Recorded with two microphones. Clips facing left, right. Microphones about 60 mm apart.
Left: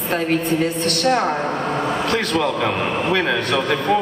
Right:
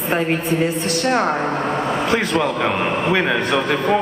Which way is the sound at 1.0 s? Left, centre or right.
Centre.